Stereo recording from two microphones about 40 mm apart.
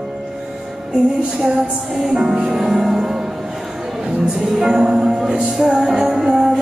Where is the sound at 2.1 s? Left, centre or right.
Right.